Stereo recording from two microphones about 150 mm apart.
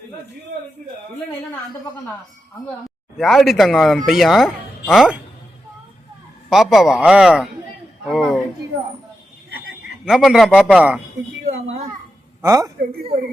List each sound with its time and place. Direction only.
3.2 s speech: centre (ahead or behind)
6.5 s speech: centre (ahead or behind)
10.1 s speech: centre (ahead or behind)
12.4 s speech: 20° right (ahead or behind)